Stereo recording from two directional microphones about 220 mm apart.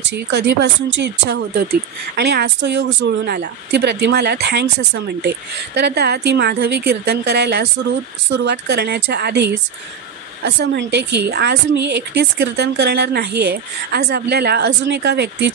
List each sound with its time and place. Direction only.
0.1 s speech: 50° right (ahead or behind)